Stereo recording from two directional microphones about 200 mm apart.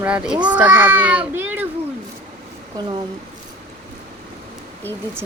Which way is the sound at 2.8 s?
20° right (ahead or behind).